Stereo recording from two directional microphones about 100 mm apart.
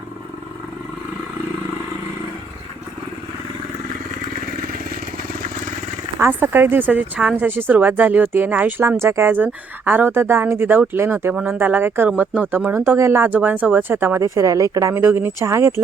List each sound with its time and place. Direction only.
6.1 s speech: 20° right (ahead or behind)